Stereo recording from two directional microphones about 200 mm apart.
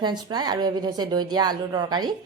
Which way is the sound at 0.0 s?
20° right (ahead or behind).